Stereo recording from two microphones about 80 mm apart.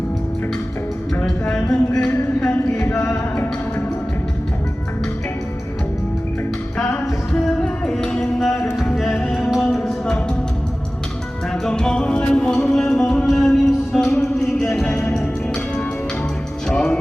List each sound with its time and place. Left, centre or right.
2.0 s a sound: centre
2.8 s music: left
7.3 s music: centre
11.6 s music: centre
16.6 s music: centre